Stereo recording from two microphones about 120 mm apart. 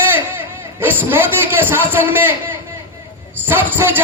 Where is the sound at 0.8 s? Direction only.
15° right (ahead or behind).